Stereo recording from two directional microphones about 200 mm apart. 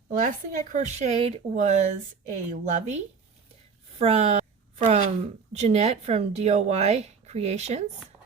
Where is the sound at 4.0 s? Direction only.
30° right (ahead or behind).